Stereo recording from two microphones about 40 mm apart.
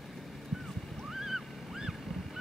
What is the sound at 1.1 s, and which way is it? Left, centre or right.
Ocean, centre.